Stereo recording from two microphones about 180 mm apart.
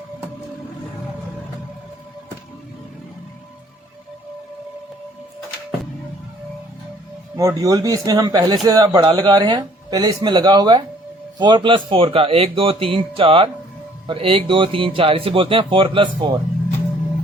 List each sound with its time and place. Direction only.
7.3 s speech: 20° right (ahead or behind)